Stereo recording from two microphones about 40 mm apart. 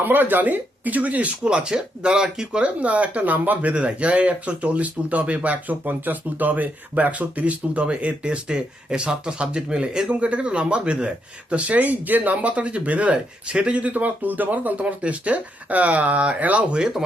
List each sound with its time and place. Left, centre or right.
0.0 s speech: right
1.5 s speech: right
11.5 s speech: right
12.4 s speech: right